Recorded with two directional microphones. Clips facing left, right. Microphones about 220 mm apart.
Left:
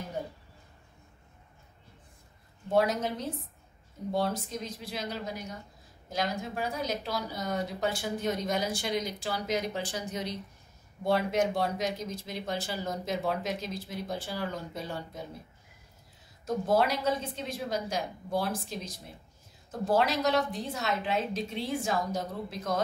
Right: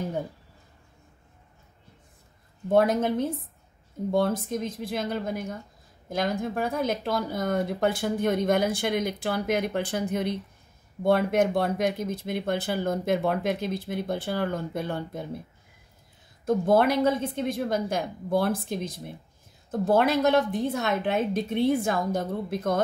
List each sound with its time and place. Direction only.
2.7 s speech: 55° right (ahead or behind)
16.4 s speech: 55° right (ahead or behind)